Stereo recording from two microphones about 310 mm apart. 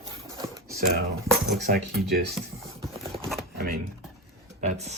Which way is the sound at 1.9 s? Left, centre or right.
Centre.